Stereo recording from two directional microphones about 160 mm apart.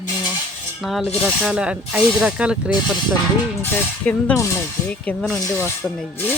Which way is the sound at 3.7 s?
10° left (ahead or behind).